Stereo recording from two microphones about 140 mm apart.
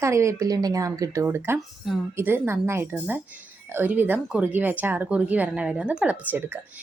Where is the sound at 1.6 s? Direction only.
Centre (ahead or behind).